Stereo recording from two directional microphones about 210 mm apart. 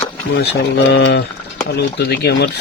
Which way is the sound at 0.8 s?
55° left (ahead or behind).